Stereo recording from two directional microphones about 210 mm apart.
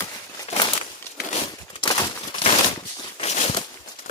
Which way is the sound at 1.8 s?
20° left (ahead or behind).